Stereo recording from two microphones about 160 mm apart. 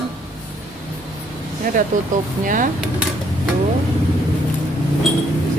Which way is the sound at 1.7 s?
60° right (ahead or behind).